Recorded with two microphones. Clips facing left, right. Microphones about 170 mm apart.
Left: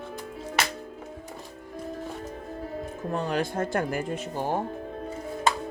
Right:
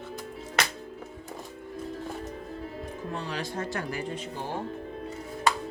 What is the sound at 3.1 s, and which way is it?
Speech, 50° left (ahead or behind).